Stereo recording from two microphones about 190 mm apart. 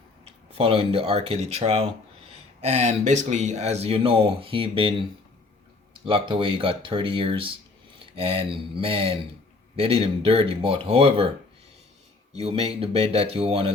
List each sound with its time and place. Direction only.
0.3 s speech: 30° right (ahead or behind)
12.3 s speech: 35° right (ahead or behind)